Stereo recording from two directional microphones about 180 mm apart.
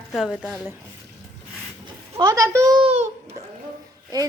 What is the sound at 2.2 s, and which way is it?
Speech, 20° right (ahead or behind).